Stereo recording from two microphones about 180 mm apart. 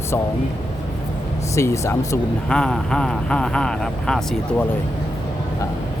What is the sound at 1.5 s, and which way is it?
Speech, 15° left (ahead or behind).